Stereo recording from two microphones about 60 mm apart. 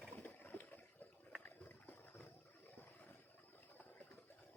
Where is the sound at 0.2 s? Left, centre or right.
Left.